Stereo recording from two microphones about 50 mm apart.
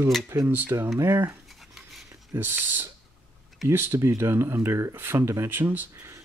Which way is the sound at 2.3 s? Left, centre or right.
Right.